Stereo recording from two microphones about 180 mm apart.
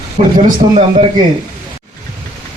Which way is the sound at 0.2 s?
35° right (ahead or behind).